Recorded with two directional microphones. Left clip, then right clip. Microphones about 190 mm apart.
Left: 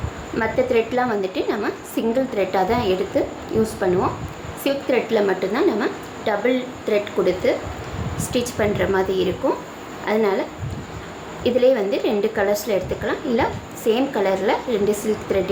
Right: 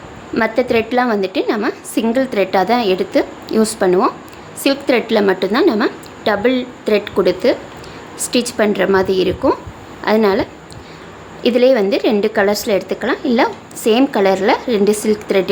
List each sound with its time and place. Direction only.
0.3 s a woman's voice: 45° right (ahead or behind)
11.4 s a woman's voice: 45° right (ahead or behind)